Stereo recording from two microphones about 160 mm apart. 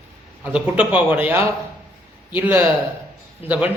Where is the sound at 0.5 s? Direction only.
10° right (ahead or behind).